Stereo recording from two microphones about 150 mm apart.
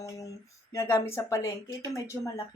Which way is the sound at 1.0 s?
20° left (ahead or behind).